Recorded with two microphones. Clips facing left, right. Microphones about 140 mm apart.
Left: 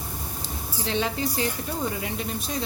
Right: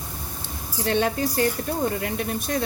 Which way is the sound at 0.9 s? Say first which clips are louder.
Right 4 dB; 55° right (ahead or behind).